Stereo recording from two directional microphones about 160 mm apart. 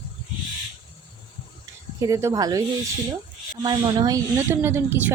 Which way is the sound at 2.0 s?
20° right (ahead or behind).